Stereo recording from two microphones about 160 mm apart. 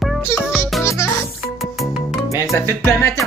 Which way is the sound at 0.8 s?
15° left (ahead or behind).